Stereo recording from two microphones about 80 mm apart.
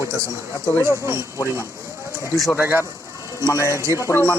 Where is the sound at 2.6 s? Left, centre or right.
Right.